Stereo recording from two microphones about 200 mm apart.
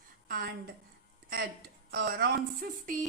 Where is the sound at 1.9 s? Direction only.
55° right (ahead or behind).